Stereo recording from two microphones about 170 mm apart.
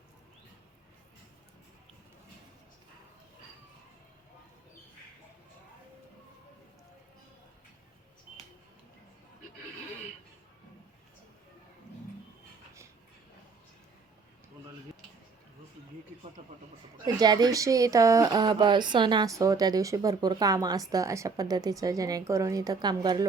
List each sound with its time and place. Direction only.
16.4 s speech: 30° right (ahead or behind)